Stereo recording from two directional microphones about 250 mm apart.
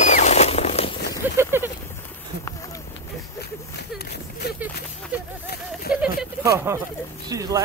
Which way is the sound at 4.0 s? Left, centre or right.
Left.